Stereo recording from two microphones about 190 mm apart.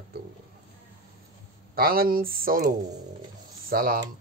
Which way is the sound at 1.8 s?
50° right (ahead or behind).